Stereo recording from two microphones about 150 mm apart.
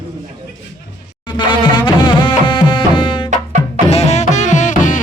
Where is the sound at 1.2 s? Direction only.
30° left (ahead or behind).